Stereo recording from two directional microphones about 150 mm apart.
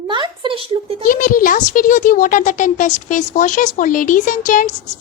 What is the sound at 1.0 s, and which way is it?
A woman's voice, 70° left (ahead or behind).